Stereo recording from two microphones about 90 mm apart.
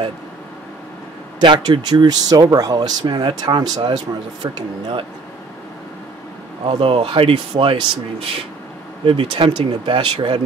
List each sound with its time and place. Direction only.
1.4 s speech: 65° right (ahead or behind)
1.8 s speech: 50° right (ahead or behind)
6.6 s speech: 75° right (ahead or behind)
9.0 s speech: 80° right